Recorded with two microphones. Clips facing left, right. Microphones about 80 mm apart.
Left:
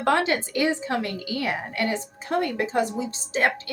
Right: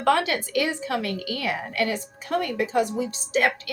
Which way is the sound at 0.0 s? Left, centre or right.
Left.